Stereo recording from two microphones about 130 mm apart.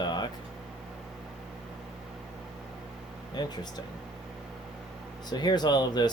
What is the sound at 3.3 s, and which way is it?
Speech, 30° left (ahead or behind).